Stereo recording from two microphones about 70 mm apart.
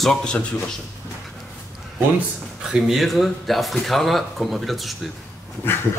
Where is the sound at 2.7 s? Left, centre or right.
Centre.